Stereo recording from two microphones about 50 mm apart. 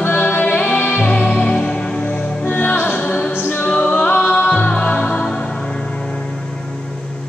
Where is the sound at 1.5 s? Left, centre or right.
Centre.